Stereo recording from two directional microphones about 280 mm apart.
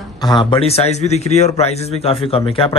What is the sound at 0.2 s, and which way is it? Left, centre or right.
A man's voice, centre.